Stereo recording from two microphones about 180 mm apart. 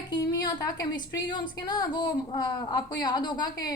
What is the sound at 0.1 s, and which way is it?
A woman's voice, 20° left (ahead or behind).